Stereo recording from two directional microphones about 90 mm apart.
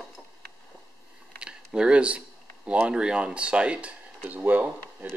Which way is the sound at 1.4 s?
10° right (ahead or behind).